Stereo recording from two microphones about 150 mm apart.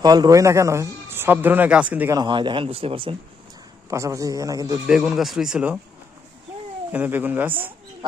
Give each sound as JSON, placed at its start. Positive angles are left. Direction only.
{"t": 0.0, "sound": "speech", "side_deg": -25}
{"t": 2.1, "sound": "speech", "side_deg": -30}
{"t": 3.8, "sound": "speech", "side_deg": -20}
{"t": 4.9, "sound": "speech", "side_deg": -5}
{"t": 6.9, "sound": "speech", "side_deg": -10}